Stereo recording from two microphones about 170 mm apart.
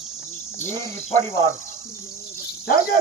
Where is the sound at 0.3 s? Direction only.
40° left (ahead or behind).